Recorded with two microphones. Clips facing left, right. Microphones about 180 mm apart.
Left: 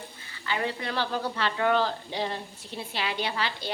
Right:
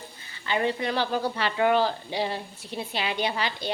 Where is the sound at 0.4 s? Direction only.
20° right (ahead or behind).